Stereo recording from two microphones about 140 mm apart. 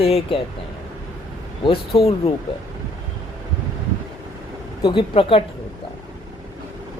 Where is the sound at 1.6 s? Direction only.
40° left (ahead or behind).